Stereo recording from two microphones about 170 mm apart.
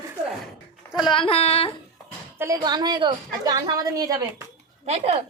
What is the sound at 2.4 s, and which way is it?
A woman's voice, 20° right (ahead or behind).